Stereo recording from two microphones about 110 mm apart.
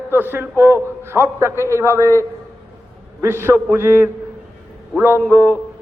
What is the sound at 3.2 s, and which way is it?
Speech, 20° right (ahead or behind).